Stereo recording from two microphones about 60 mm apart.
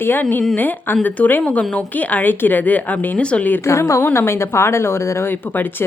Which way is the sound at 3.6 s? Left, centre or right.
Left.